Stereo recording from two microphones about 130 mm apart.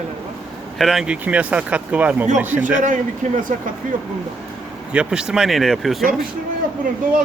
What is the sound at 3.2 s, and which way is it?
Speech, 65° right (ahead or behind).